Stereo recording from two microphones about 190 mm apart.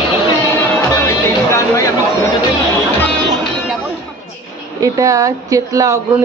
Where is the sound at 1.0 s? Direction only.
15° left (ahead or behind).